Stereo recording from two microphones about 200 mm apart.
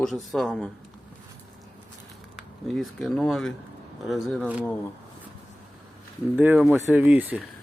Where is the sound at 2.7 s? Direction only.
Centre (ahead or behind).